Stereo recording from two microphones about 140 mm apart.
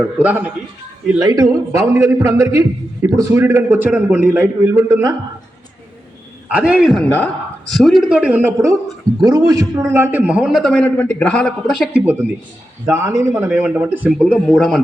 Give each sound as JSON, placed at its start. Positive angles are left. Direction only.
{"t": 0.0, "sound": "a man's voice", "side_deg": -10}
{"t": 1.2, "sound": "a man's voice", "side_deg": -25}
{"t": 6.5, "sound": "a man's voice", "side_deg": -10}
{"t": 9.2, "sound": "a man's voice", "side_deg": -25}
{"t": 10.8, "sound": "a man's voice", "side_deg": 15}
{"t": 14.1, "sound": "a man's voice", "side_deg": 0}